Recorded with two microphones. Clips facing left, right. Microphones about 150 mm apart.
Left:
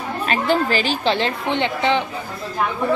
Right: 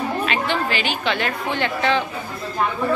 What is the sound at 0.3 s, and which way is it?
A woman's voice, 40° left (ahead or behind).